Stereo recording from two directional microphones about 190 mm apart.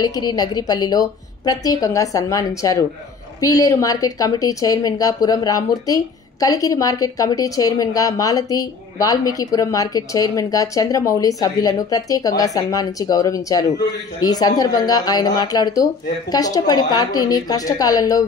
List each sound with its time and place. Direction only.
0.0 s a woman's voice: 20° left (ahead or behind)